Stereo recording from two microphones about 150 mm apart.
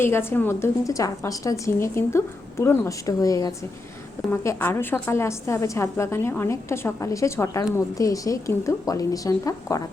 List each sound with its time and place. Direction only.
0.0 s a woman's voice: 15° left (ahead or behind)